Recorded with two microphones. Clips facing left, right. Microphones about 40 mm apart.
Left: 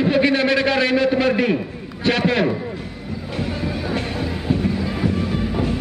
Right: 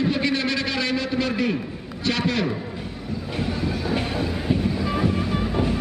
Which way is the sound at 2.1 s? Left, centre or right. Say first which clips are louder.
Left 5 dB; left.